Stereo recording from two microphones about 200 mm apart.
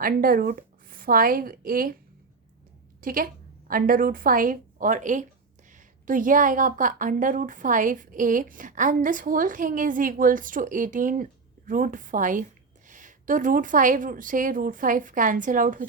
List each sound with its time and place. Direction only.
0.0 s a woman's voice: 45° right (ahead or behind)
3.0 s a woman's voice: 45° right (ahead or behind)